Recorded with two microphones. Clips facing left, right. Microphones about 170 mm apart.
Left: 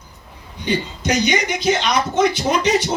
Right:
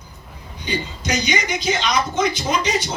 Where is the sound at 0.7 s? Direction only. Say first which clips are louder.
Left 4 dB; 60° left (ahead or behind).